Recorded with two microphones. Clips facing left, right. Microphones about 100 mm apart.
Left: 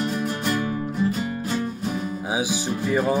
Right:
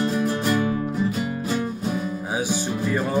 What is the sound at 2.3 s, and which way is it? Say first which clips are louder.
Music: even; 10° left (ahead or behind).